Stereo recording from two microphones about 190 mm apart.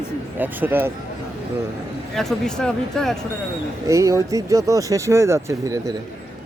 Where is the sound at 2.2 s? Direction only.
Centre (ahead or behind).